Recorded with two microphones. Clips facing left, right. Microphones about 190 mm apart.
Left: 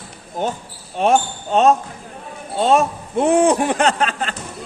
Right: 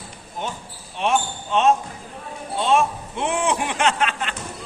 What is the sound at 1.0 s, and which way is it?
A man's voice, 40° left (ahead or behind).